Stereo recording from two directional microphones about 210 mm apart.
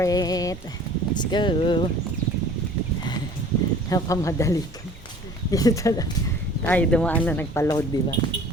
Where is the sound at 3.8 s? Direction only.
15° left (ahead or behind).